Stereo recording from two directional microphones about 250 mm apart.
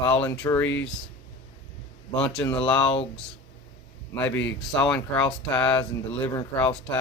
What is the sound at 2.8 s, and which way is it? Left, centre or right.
Speech, left.